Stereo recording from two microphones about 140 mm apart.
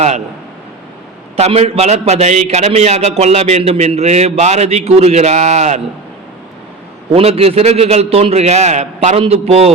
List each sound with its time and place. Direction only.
1.4 s a man's voice: 50° right (ahead or behind)
7.1 s a man's voice: 45° right (ahead or behind)